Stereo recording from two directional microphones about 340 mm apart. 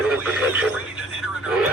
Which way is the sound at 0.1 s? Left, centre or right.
Centre.